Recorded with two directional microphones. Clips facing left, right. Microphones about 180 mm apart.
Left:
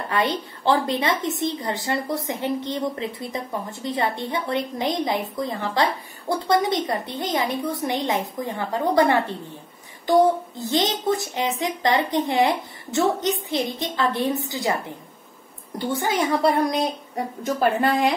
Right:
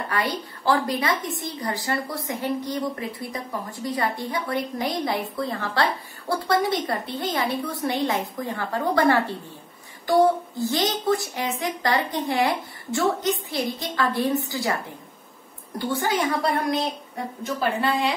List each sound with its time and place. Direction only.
0.1 s a woman's voice: 25° left (ahead or behind)
10.6 s a woman's voice: 20° left (ahead or behind)
15.8 s a woman's voice: 20° left (ahead or behind)
17.4 s speech: 45° left (ahead or behind)